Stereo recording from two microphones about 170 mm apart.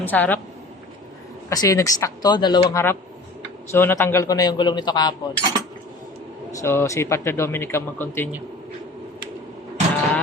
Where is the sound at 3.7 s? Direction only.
15° left (ahead or behind).